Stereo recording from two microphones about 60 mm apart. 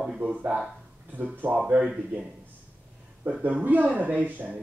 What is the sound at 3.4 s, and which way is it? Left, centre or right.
A man's voice, right.